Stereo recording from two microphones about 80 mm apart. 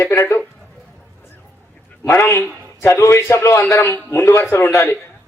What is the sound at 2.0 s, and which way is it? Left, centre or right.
A man's voice, left.